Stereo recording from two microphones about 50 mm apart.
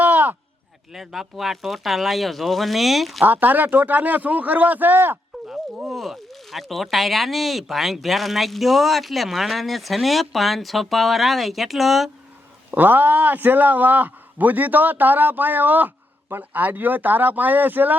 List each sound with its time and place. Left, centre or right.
0.0 s a sound: right
0.9 s speech: centre
3.2 s a man's voice: right
5.8 s speech: centre
12.7 s a man's voice: right